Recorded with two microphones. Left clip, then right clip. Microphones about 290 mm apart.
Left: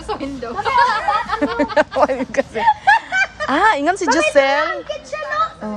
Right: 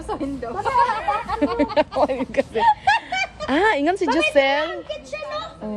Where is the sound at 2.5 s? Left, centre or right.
Left.